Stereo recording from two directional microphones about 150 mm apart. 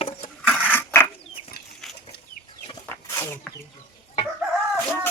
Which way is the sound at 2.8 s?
15° left (ahead or behind).